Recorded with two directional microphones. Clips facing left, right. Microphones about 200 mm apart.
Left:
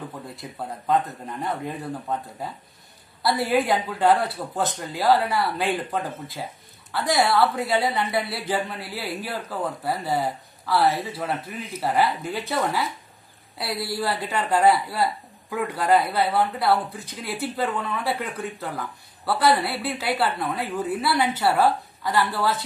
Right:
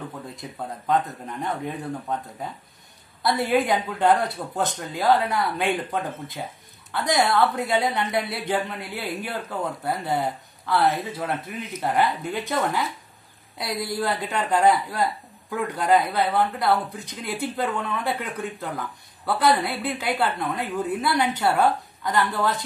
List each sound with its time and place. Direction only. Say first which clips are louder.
0.4 s speech: even; centre (ahead or behind)
13.6 s speech: right 1 dB; 5° left (ahead or behind)